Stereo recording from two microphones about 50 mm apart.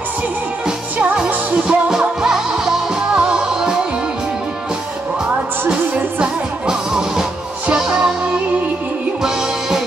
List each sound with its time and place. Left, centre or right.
1.1 s music: centre
5.7 s music: centre